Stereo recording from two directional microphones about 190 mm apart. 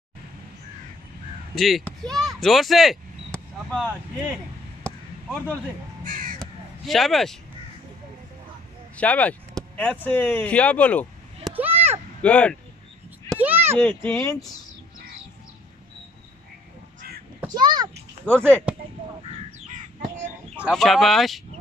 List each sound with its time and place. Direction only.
1.5 s speech: centre (ahead or behind)
4.8 s a sound: 5° left (ahead or behind)
6.0 s crow: 45° right (ahead or behind)
6.4 s a sound: centre (ahead or behind)
8.9 s speech: 5° left (ahead or behind)
11.5 s a sound: 10° right (ahead or behind)
12.2 s speech: 5° left (ahead or behind)
13.4 s a sound: 10° right (ahead or behind)
13.7 s speech: 10° left (ahead or behind)
17.6 s a child's voice: 25° right (ahead or behind)
18.2 s speech: 5° left (ahead or behind)
20.5 s speech: 5° right (ahead or behind)